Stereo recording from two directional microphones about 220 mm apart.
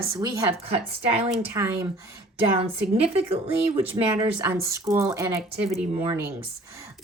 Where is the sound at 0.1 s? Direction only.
15° right (ahead or behind).